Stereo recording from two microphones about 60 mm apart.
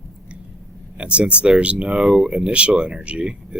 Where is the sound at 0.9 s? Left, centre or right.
Centre.